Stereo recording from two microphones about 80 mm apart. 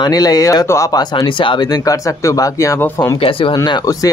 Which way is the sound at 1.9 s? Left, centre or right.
Left.